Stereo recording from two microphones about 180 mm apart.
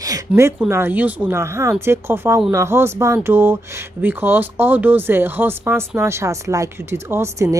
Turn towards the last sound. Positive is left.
turn(degrees=-15)  # may be behind; listen again after turning